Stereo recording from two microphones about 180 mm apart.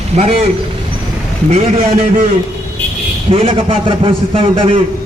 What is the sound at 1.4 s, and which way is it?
Speech, 35° right (ahead or behind).